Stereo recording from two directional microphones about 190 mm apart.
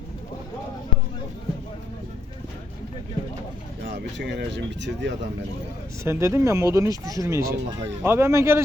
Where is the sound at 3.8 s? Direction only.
65° right (ahead or behind).